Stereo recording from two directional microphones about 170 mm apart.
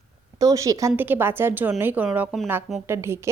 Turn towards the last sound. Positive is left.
turn(degrees=-15)  # may be behind; listen again after turning